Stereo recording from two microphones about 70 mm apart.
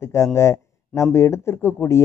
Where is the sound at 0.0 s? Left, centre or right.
Left.